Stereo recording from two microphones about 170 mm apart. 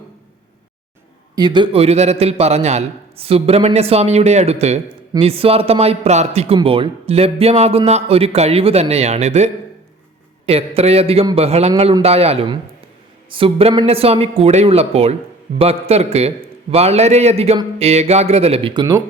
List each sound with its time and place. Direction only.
1.4 s a man's voice: 25° right (ahead or behind)